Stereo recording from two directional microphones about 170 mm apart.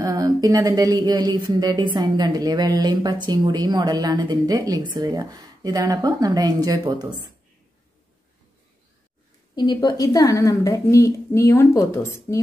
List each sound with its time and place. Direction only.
0.0 s speech: 20° right (ahead or behind)
9.6 s a woman's voice: 25° left (ahead or behind)